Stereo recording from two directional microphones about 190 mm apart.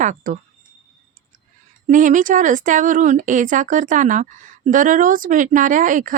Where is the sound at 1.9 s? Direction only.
45° right (ahead or behind).